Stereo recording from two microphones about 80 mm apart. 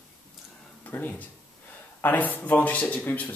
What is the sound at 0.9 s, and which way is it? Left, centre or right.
Speech, left.